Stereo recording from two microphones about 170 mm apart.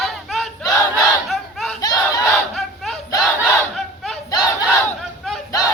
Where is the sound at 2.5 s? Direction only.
Centre (ahead or behind).